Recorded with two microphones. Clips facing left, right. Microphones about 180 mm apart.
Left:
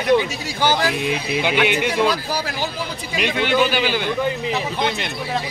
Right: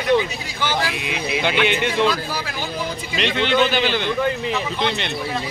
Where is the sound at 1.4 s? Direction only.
10° left (ahead or behind).